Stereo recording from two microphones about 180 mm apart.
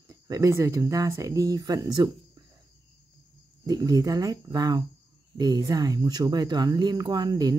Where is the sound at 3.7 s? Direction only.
20° right (ahead or behind).